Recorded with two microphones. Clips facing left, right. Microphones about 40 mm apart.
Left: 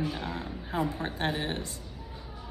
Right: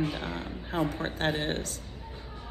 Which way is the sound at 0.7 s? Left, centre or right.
Right.